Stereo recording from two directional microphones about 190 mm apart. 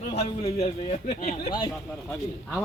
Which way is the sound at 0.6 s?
30° left (ahead or behind).